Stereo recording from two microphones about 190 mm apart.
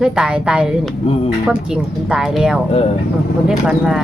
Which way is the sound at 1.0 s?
30° left (ahead or behind).